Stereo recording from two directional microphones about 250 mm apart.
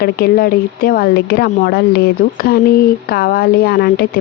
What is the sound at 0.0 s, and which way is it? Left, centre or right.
Speech, left.